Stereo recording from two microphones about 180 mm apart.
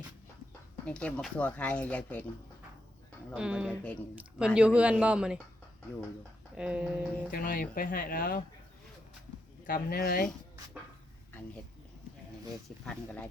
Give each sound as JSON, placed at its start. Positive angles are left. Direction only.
{"t": 0.9, "sound": "speech", "side_deg": 5}
{"t": 3.2, "sound": "speech", "side_deg": -5}
{"t": 6.6, "sound": "speech", "side_deg": -5}
{"t": 7.3, "sound": "speech", "side_deg": 50}
{"t": 9.6, "sound": "speech", "side_deg": 55}
{"t": 12.8, "sound": "speech", "side_deg": 10}